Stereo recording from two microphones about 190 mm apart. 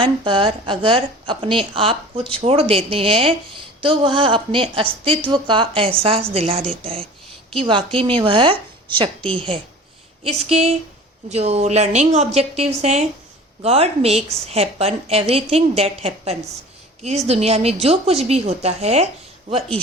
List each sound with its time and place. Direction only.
0.0 s a woman's voice: 25° right (ahead or behind)